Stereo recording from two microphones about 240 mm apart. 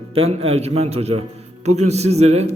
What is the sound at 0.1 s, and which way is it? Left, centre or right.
A man's voice, right.